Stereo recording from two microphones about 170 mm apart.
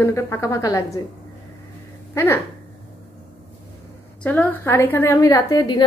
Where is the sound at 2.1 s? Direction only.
15° left (ahead or behind).